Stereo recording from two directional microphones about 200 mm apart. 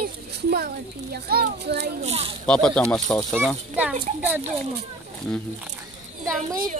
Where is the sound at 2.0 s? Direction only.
30° right (ahead or behind).